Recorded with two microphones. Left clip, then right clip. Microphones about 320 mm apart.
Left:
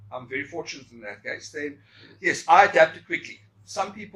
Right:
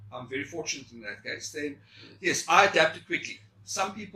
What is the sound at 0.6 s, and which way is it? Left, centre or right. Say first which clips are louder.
A man's voice: right 1 dB; left.